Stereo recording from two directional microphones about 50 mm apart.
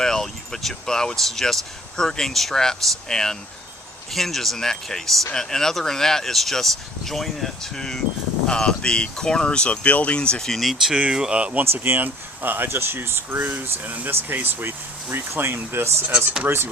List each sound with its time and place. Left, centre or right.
0.0 s speech: centre
10.4 s speech: centre
10.9 s speech: centre
11.9 s speech: right